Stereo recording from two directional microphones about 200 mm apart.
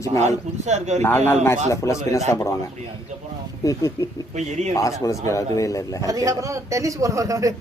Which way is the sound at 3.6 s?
15° left (ahead or behind).